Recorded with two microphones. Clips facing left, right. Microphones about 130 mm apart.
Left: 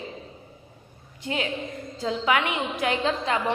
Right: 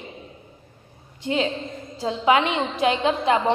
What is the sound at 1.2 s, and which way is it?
A woman's voice, 25° right (ahead or behind).